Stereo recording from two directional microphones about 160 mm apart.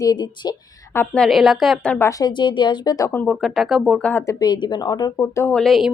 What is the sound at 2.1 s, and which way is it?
A woman's voice, 25° left (ahead or behind).